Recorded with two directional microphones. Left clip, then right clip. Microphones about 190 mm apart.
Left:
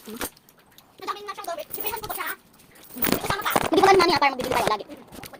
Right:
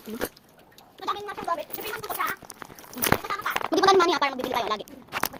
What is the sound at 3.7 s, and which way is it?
Speech, 30° right (ahead or behind).